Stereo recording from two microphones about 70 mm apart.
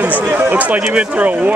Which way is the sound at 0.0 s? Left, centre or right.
Right.